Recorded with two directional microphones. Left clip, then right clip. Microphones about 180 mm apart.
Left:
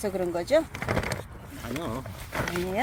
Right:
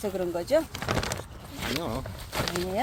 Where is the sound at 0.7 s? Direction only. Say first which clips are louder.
Even; 15° left (ahead or behind).